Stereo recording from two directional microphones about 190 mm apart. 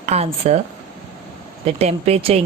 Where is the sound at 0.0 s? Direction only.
35° right (ahead or behind).